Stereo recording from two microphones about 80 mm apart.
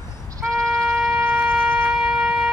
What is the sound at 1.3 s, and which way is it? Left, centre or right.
Shofar, centre.